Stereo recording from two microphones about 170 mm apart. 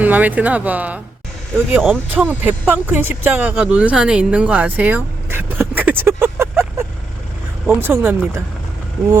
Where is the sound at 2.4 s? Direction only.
10° right (ahead or behind).